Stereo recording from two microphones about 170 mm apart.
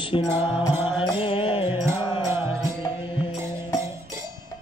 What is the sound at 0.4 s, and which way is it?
Music, 30° left (ahead or behind).